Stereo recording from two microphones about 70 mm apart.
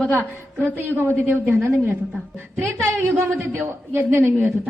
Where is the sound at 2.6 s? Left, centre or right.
Right.